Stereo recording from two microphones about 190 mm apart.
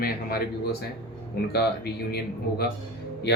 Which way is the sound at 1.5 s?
60° left (ahead or behind).